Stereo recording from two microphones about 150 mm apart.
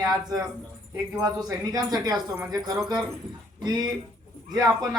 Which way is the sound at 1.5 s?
25° right (ahead or behind).